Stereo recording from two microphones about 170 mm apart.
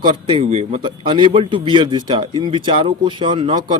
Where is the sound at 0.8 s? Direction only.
25° right (ahead or behind).